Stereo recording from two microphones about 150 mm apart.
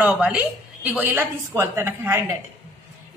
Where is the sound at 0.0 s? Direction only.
5° right (ahead or behind).